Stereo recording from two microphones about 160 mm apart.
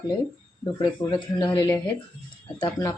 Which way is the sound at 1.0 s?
15° left (ahead or behind).